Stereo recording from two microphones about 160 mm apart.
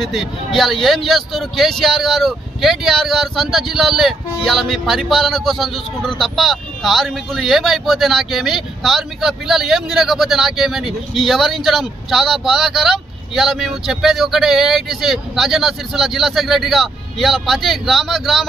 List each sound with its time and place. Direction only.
0.0 s speech: centre (ahead or behind)